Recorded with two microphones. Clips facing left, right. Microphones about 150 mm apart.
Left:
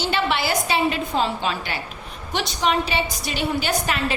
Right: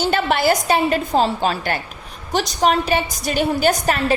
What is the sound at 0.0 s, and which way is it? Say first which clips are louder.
A woman's voice: right 5 dB; 45° right (ahead or behind).